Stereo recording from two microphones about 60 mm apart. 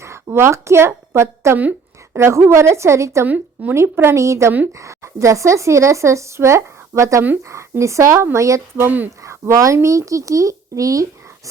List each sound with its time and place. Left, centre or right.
0.3 s a woman's voice: right
3.2 s speech: right
3.8 s a woman's voice: right
9.2 s a sound: right
9.7 s speech: right